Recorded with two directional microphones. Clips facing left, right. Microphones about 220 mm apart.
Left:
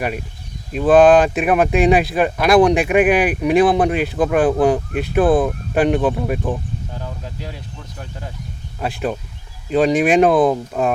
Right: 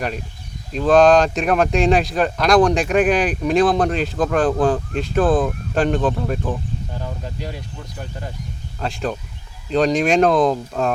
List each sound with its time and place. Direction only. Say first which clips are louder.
0.7 s speech: left 2 dB; 5° left (ahead or behind)
7.0 s speech: right 1 dB; centre (ahead or behind)